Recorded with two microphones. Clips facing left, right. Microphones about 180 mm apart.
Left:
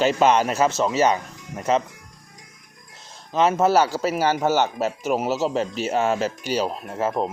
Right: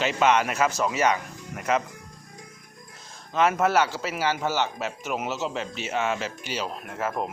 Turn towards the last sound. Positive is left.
turn(degrees=30)  # may be behind; listen again after turning